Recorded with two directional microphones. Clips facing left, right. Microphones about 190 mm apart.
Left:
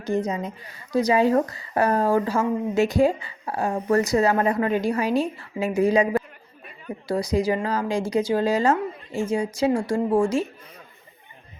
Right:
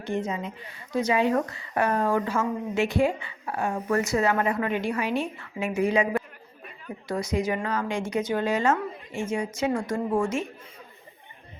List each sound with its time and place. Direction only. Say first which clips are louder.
0.0 s speech: left 4 dB; 40° left (ahead or behind)
7.1 s speech: left 4 dB; 35° left (ahead or behind)